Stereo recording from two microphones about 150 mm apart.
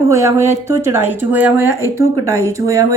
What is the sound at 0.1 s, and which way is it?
A woman's voice, 20° right (ahead or behind).